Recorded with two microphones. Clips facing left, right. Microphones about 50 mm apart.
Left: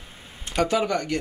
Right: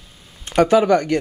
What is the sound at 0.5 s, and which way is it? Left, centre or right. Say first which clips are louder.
Speech: right 9 dB; right.